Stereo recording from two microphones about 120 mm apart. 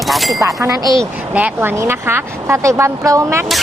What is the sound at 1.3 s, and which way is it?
A woman's voice, 10° right (ahead or behind).